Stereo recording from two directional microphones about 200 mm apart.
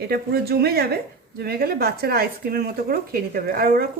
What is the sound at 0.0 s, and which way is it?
Speech, 50° right (ahead or behind).